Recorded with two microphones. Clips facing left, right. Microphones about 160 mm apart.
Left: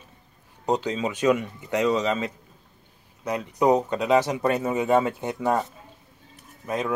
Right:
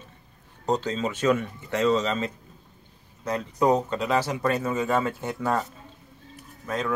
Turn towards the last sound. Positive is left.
turn(degrees=15)  # may be behind; listen again after turning